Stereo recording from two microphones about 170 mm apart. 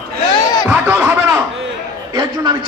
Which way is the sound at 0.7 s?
10° right (ahead or behind).